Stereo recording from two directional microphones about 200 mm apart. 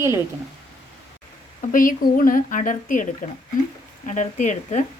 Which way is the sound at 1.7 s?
40° left (ahead or behind).